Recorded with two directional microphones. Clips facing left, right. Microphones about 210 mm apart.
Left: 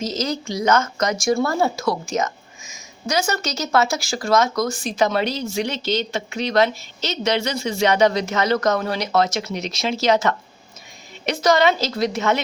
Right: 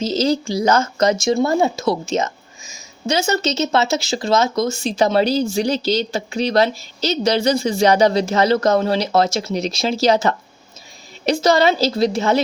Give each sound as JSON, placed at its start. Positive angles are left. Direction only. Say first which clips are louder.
{"t": 0.0, "sound": "a woman's voice", "louder": "right 6 dB", "side_deg": -30}